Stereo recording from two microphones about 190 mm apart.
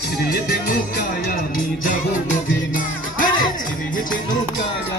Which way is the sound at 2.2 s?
45° left (ahead or behind).